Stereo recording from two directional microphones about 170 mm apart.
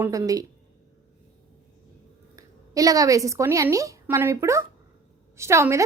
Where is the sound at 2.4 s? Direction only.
20° right (ahead or behind).